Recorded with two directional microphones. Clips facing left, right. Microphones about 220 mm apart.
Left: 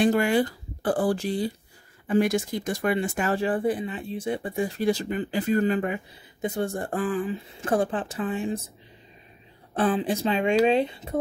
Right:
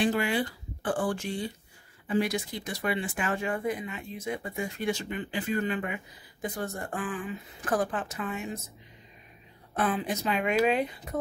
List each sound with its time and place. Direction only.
0.0 s speech: 45° left (ahead or behind)
2.0 s speech: 50° left (ahead or behind); by 8.6 s 30° left (ahead or behind)
9.8 s speech: 30° left (ahead or behind)